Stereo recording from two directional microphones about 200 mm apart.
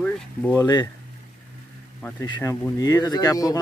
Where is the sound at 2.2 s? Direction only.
20° left (ahead or behind).